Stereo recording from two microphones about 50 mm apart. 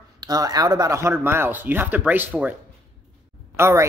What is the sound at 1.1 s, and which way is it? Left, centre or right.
Speech, right.